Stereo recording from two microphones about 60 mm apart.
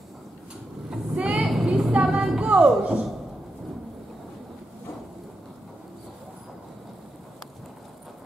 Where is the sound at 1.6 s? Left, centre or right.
Centre.